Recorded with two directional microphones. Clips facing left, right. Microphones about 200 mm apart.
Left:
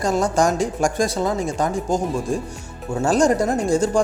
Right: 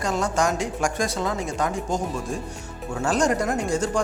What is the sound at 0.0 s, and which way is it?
Speech, 35° left (ahead or behind).